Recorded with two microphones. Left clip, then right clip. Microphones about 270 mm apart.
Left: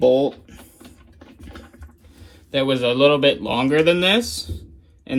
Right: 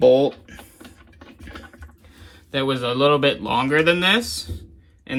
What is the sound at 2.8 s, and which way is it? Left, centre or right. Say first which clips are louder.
Speech: left 4 dB; right.